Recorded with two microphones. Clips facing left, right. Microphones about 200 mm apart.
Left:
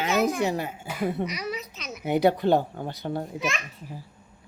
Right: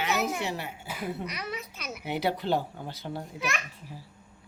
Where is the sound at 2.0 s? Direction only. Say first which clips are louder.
Left 8 dB; 50° left (ahead or behind).